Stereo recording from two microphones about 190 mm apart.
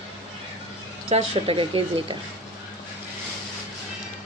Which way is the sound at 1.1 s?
30° right (ahead or behind).